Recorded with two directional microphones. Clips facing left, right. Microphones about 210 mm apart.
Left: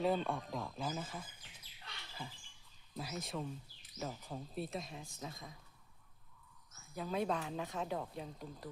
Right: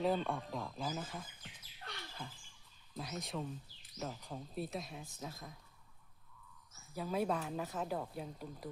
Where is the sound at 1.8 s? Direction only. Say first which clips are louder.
Right 6 dB; 55° right (ahead or behind).